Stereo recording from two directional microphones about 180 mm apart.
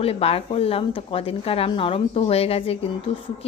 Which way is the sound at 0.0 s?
35° left (ahead or behind).